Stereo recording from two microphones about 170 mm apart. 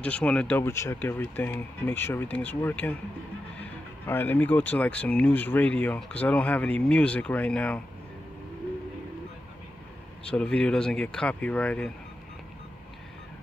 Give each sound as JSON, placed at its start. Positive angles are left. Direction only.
{"t": 0.0, "sound": "speech", "side_deg": 5}
{"t": 4.0, "sound": "speech", "side_deg": 10}
{"t": 10.2, "sound": "speech", "side_deg": 5}